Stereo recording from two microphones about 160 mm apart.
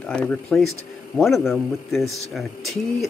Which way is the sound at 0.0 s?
5° left (ahead or behind).